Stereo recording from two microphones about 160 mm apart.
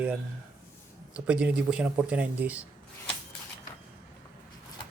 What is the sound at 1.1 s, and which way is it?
Speech, 10° right (ahead or behind).